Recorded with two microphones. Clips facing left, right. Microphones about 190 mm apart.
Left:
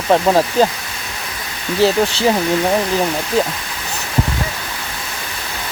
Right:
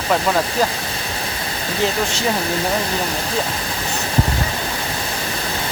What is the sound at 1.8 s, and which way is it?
Speech, 35° left (ahead or behind).